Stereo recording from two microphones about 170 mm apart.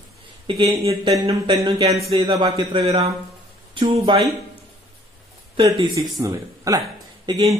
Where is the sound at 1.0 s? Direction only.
20° right (ahead or behind).